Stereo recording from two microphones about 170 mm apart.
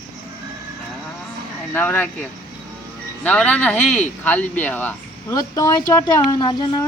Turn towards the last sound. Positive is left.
turn(degrees=25)  # may be behind; listen again after turning